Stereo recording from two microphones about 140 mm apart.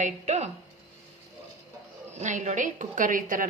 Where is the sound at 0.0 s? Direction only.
55° right (ahead or behind).